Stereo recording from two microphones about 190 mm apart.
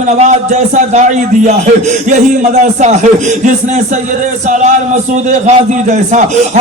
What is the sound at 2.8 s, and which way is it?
Speech, 40° right (ahead or behind).